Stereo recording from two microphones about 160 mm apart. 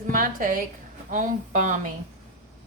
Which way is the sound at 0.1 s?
55° right (ahead or behind).